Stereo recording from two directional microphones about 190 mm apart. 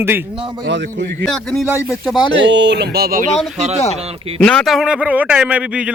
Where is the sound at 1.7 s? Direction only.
15° left (ahead or behind).